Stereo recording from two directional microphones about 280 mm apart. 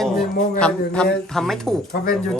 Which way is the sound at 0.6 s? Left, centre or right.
Centre.